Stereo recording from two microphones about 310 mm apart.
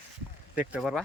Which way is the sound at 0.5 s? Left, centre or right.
Centre.